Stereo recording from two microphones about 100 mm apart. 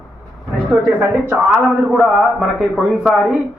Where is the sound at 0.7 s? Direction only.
10° right (ahead or behind).